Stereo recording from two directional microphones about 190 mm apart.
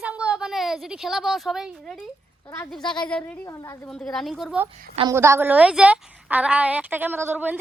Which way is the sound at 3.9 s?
5° left (ahead or behind).